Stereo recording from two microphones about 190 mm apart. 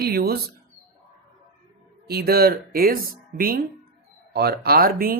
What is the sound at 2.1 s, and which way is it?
Speech, 55° right (ahead or behind).